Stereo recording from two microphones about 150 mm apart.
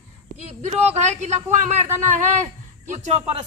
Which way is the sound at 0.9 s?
50° right (ahead or behind).